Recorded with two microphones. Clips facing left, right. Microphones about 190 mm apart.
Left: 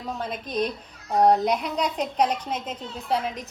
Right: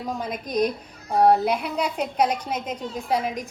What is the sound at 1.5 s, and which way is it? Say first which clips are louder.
A woman's voice: even; 5° right (ahead or behind).